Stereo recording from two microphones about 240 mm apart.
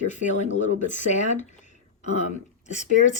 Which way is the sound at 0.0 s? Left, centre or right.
Left.